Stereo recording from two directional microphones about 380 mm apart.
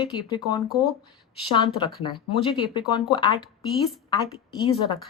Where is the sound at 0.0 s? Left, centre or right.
Centre.